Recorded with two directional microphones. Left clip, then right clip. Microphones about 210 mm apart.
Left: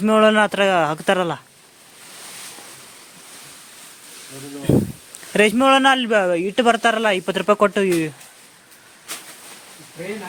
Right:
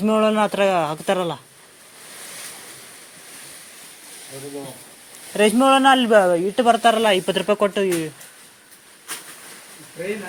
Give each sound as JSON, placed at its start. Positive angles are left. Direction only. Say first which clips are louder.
{"t": 0.0, "sound": "a man's voice", "louder": "left 3 dB", "side_deg": 35}
{"t": 5.3, "sound": "a man's voice", "louder": "left 1 dB", "side_deg": 45}